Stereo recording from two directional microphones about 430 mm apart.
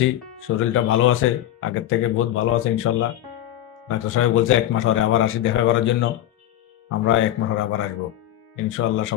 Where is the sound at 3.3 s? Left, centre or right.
Right.